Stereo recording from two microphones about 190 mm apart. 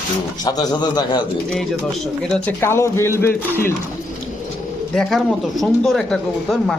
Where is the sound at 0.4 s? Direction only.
20° left (ahead or behind).